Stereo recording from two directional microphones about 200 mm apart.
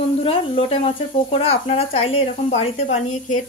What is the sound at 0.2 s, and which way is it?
A woman's voice, 30° left (ahead or behind).